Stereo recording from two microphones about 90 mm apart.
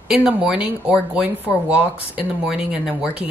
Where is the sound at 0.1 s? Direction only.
10° right (ahead or behind).